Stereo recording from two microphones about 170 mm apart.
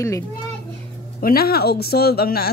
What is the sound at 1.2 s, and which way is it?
A man's voice, 60° left (ahead or behind).